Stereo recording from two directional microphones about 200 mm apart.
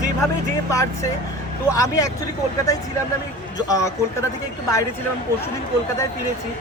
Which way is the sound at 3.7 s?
15° left (ahead or behind).